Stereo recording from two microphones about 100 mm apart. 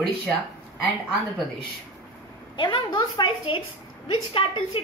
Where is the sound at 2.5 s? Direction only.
55° left (ahead or behind).